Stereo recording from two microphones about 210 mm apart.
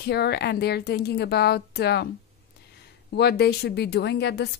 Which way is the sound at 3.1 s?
50° left (ahead or behind).